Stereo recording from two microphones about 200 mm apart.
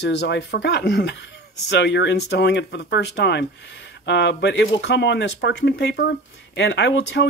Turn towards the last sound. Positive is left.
turn(degrees=60)  # may be behind; listen again after turning